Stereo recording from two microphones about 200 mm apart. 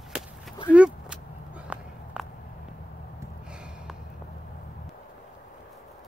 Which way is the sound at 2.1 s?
5° right (ahead or behind).